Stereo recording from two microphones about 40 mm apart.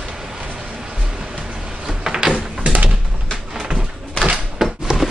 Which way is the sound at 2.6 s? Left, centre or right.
Right.